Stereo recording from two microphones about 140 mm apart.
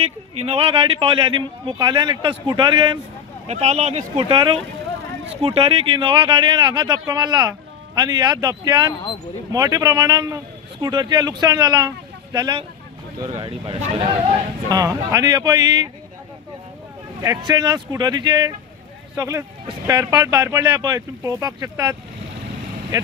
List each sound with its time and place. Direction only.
0.0 s speech: 45° right (ahead or behind)
3.4 s a man's voice: 50° right (ahead or behind); by 13.5 s 30° right (ahead or behind)
13.7 s speech: 40° right (ahead or behind)
14.7 s a man's voice: 25° right (ahead or behind)
17.2 s a man's voice: 25° right (ahead or behind)